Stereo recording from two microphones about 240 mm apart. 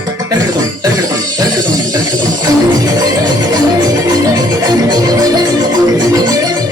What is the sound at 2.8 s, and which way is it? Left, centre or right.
Music, centre.